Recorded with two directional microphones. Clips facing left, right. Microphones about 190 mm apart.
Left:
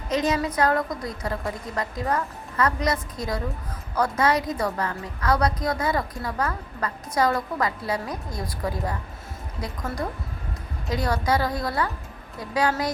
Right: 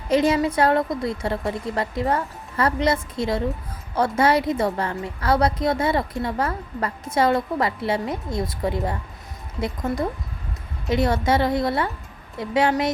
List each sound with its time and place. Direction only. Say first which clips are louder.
0.1 s a woman's voice: right 5 dB; 30° right (ahead or behind)